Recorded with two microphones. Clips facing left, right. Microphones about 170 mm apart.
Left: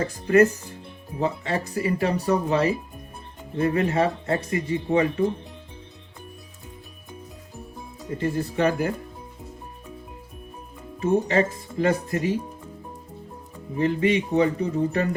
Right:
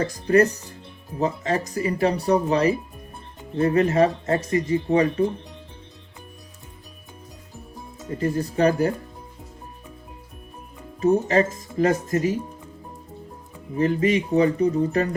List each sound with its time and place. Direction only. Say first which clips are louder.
0.0 s speech: even; 35° right (ahead or behind)
8.2 s speech: right 2 dB; 40° right (ahead or behind)
11.0 s speech: right 2 dB; 40° right (ahead or behind)
13.7 s speech: right 1 dB; 40° right (ahead or behind)